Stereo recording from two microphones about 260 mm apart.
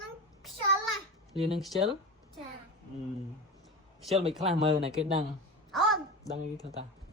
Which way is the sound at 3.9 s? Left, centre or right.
Centre.